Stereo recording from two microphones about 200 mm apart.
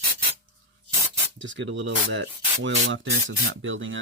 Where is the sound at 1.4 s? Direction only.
65° right (ahead or behind).